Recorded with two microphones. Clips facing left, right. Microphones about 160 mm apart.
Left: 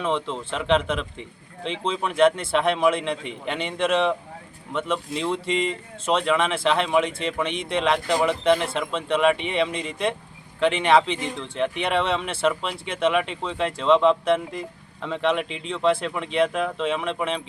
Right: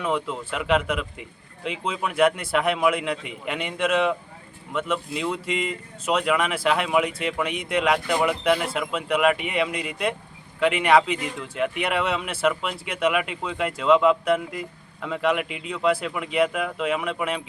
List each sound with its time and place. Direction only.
0.0 s speech: 10° right (ahead or behind)
2.4 s speech: 30° left (ahead or behind)
2.8 s speech: 5° right (ahead or behind)
5.1 s speech: 30° left (ahead or behind)
5.5 s speech: 5° right (ahead or behind)
6.4 s speech: 25° left (ahead or behind)
6.8 s speech: 5° right (ahead or behind)
7.5 s speech: 30° left (ahead or behind)
7.9 s speech: 5° right (ahead or behind)
12.6 s speech: 30° left (ahead or behind)
13.1 s speech: 5° right (ahead or behind)